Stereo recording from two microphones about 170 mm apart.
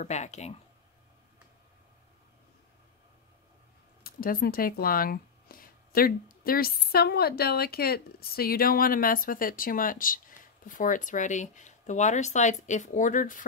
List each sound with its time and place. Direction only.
0.0 s speech: 40° left (ahead or behind)
4.0 s speech: 60° left (ahead or behind)